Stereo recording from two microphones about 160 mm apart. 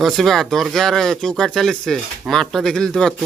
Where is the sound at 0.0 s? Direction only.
Centre (ahead or behind).